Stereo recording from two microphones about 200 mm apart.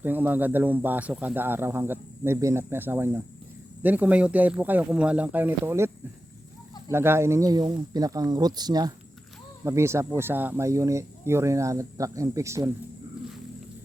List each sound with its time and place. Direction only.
0.0 s speech: 10° right (ahead or behind)
6.9 s speech: 10° right (ahead or behind)